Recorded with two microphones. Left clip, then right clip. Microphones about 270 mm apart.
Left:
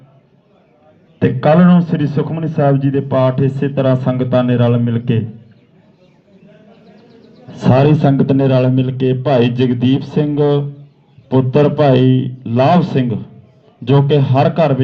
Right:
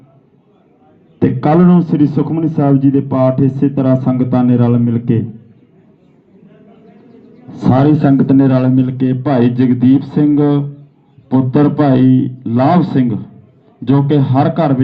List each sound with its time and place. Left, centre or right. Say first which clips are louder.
1.2 s a man's voice: even; left
7.4 s a man's voice: even; left